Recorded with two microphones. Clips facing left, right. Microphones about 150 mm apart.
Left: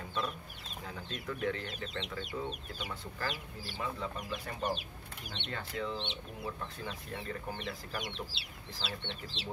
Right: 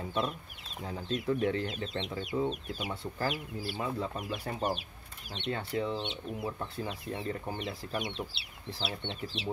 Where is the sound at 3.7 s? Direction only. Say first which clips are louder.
Right 3 dB; 30° right (ahead or behind).